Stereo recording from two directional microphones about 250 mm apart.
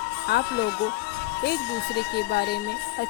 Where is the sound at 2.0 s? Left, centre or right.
Left.